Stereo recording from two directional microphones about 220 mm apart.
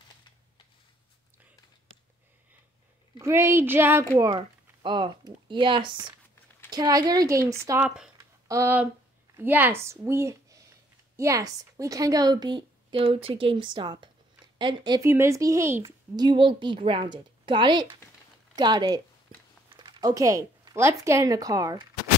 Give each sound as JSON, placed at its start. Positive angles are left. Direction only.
{"t": 3.2, "sound": "speech", "side_deg": -10}
{"t": 4.8, "sound": "a woman's voice", "side_deg": -20}
{"t": 8.2, "sound": "a sound", "side_deg": -15}
{"t": 9.3, "sound": "a woman's voice", "side_deg": -10}